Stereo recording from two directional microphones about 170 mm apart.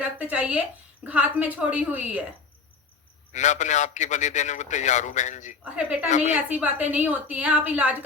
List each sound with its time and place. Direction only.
0.0 s a woman's voice: 10° right (ahead or behind)
3.3 s a man's voice: 45° left (ahead or behind)
5.6 s a woman's voice: 5° right (ahead or behind)
6.1 s a man's voice: 45° left (ahead or behind)
6.3 s a woman's voice: 10° right (ahead or behind)